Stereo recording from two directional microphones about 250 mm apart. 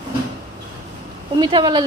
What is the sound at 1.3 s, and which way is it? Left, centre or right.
Speech, centre.